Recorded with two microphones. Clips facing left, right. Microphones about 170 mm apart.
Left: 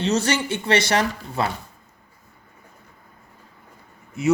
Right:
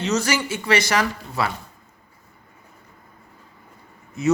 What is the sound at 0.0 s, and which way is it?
Speech, 30° left (ahead or behind).